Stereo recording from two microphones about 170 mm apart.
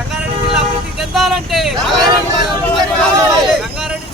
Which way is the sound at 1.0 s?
Centre (ahead or behind).